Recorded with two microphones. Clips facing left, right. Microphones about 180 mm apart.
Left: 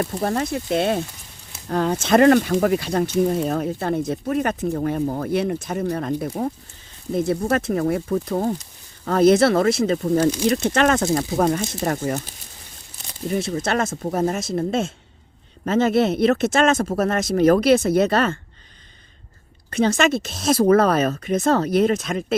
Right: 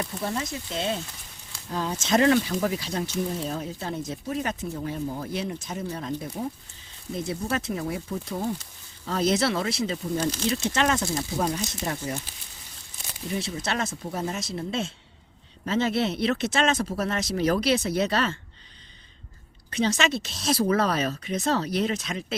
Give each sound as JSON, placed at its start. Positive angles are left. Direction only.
{"t": 0.0, "sound": "speech", "side_deg": 55}
{"t": 13.3, "sound": "speech", "side_deg": 50}
{"t": 19.7, "sound": "speech", "side_deg": 50}